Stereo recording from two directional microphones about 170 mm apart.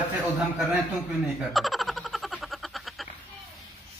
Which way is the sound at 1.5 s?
Centre (ahead or behind).